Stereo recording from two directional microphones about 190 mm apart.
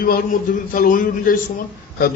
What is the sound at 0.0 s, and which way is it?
A man's voice, 45° left (ahead or behind).